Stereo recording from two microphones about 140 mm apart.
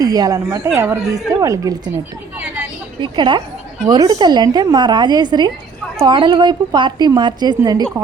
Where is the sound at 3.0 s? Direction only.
35° right (ahead or behind).